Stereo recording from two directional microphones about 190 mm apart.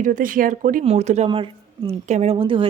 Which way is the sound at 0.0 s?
45° right (ahead or behind).